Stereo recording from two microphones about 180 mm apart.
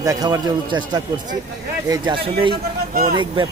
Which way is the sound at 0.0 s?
20° right (ahead or behind).